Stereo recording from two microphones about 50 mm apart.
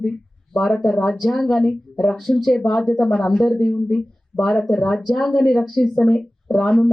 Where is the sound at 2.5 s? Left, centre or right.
Centre.